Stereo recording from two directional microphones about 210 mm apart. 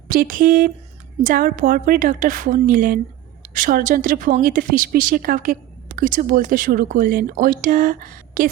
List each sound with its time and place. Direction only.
0.1 s a woman's voice: 40° right (ahead or behind)